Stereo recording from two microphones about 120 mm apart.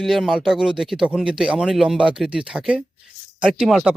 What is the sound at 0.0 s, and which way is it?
Speech, centre (ahead or behind).